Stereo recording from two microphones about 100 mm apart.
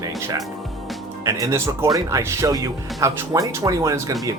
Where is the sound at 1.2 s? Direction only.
35° right (ahead or behind).